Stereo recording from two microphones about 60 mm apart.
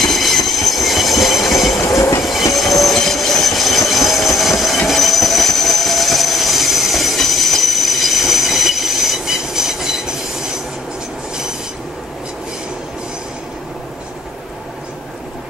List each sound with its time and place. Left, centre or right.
0.0 s train: centre
1.8 s train: left
2.5 s train: centre